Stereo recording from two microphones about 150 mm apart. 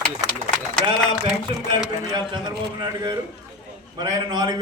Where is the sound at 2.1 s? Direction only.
25° right (ahead or behind).